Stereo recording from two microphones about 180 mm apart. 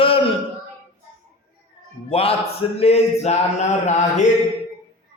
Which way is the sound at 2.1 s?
30° left (ahead or behind).